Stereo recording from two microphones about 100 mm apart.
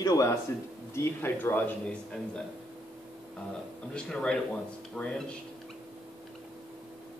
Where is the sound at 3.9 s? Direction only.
10° left (ahead or behind).